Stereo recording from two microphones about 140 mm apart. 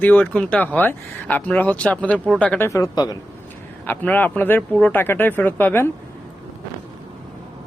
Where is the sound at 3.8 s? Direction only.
15° left (ahead or behind).